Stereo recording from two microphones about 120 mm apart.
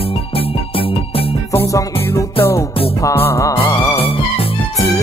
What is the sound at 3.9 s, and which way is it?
Music, 50° left (ahead or behind).